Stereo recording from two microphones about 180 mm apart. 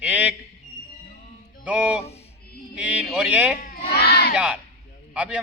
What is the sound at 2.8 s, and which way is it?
Speech, 5° right (ahead or behind).